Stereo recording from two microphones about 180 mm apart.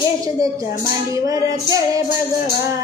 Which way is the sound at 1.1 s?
20° right (ahead or behind).